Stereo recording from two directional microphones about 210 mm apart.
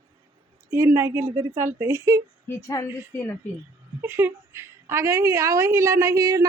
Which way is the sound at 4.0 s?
10° right (ahead or behind).